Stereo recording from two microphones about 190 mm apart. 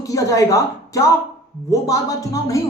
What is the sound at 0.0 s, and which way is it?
A woman's voice, 15° left (ahead or behind).